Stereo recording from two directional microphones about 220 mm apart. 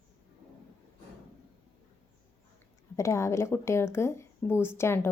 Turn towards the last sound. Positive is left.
turn(degrees=10)  # may be behind; listen again after turning